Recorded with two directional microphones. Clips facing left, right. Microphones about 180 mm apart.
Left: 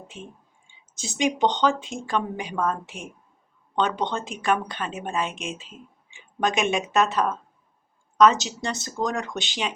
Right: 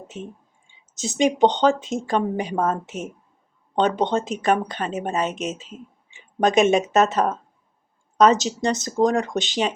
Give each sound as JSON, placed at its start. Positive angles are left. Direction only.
{"t": 0.1, "sound": "speech", "side_deg": -40}